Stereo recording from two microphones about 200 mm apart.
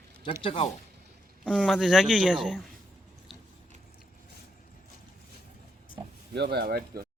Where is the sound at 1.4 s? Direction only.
Centre (ahead or behind).